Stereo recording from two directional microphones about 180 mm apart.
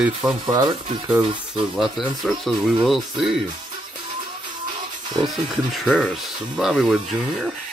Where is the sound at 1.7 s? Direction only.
Centre (ahead or behind).